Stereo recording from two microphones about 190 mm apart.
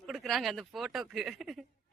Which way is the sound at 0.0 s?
Centre (ahead or behind).